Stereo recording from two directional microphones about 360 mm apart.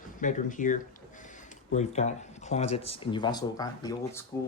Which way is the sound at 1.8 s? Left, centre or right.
Centre.